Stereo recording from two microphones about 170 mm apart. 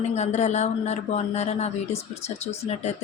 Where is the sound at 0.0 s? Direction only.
40° left (ahead or behind).